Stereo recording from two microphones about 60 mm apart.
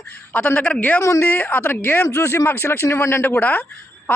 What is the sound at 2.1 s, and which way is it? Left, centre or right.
Speech, left.